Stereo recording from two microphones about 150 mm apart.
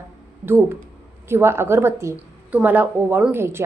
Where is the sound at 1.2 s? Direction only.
15° right (ahead or behind).